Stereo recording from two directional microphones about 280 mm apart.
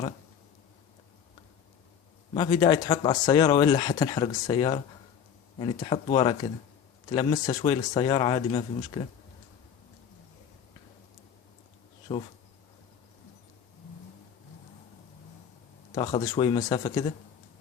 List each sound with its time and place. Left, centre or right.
2.3 s speech: centre
12.1 s speech: centre
16.0 s speech: centre